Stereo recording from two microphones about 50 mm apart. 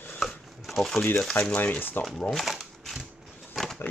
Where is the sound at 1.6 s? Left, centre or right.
Left.